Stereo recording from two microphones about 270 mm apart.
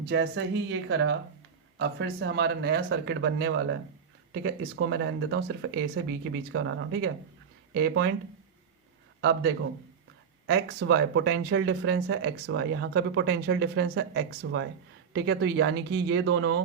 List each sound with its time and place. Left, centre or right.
0.0 s speech: right
10.4 s speech: right